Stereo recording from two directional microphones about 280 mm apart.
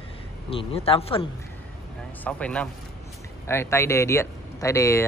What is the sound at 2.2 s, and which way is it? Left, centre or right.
Speech, centre.